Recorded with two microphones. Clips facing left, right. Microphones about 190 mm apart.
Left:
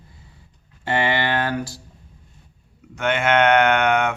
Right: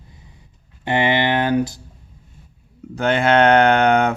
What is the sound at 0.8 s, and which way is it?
Speech, 20° right (ahead or behind).